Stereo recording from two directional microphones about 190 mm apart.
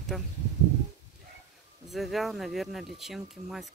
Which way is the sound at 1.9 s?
Centre (ahead or behind).